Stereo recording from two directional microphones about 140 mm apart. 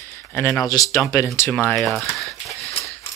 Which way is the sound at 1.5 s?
10° left (ahead or behind).